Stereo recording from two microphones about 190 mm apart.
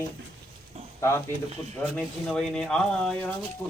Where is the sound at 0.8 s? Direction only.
35° right (ahead or behind).